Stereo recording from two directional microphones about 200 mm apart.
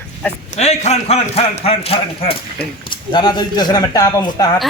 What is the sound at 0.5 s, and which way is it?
A man's voice, 35° left (ahead or behind).